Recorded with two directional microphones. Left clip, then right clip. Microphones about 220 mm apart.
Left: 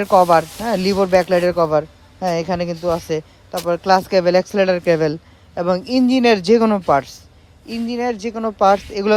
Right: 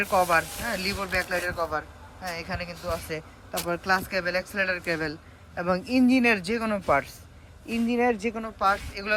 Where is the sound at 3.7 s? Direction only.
20° left (ahead or behind).